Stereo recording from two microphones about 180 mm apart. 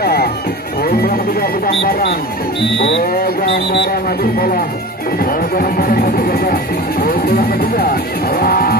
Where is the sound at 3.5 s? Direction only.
65° left (ahead or behind).